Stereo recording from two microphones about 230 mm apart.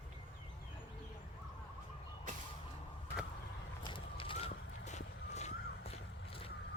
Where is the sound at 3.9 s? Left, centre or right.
Left.